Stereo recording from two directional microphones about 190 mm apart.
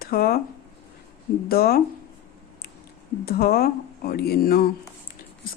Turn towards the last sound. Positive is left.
turn(degrees=50)  # may be behind; listen again after turning